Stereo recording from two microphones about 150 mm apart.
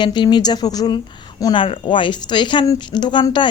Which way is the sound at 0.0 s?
30° left (ahead or behind).